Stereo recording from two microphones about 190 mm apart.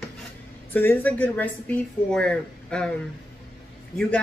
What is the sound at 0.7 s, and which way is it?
A woman's voice, 10° left (ahead or behind).